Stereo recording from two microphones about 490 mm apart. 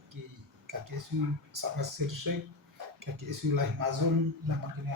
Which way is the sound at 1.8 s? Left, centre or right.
Right.